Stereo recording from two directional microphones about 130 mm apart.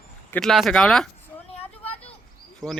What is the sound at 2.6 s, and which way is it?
Speech, centre (ahead or behind).